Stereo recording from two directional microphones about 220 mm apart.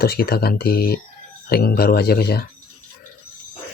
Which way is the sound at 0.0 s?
45° left (ahead or behind).